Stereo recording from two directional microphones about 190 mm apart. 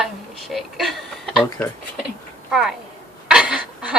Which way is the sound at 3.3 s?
5° right (ahead or behind).